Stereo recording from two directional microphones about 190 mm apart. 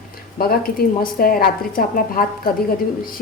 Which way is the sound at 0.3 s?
50° left (ahead or behind).